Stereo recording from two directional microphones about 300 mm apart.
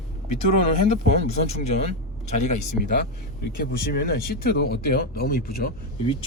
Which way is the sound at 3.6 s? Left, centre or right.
Left.